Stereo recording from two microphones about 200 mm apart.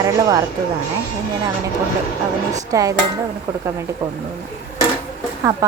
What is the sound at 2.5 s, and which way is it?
Speech, 15° right (ahead or behind).